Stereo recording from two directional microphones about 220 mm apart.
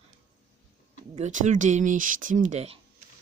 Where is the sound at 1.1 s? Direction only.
35° right (ahead or behind).